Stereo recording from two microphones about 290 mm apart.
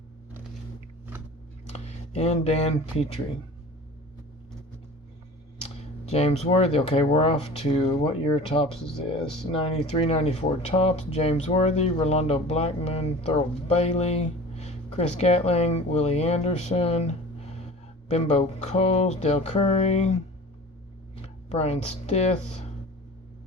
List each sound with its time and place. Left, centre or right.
1.7 s speech: left
5.8 s a sound: left
6.4 s speech: left